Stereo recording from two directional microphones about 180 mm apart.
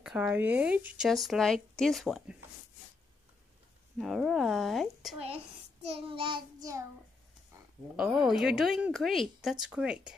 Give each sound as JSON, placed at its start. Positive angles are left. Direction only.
{"t": 0.0, "sound": "speech", "side_deg": -5}
{"t": 4.0, "sound": "speech", "side_deg": 0}
{"t": 5.2, "sound": "child singing", "side_deg": -35}
{"t": 7.9, "sound": "speech", "side_deg": -5}